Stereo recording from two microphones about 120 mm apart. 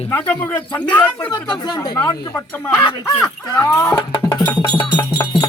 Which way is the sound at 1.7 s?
35° left (ahead or behind).